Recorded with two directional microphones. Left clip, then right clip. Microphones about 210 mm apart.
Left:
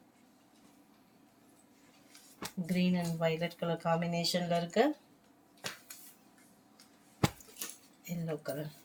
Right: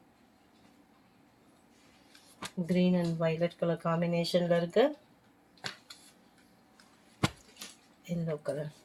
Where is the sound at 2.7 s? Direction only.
45° right (ahead or behind).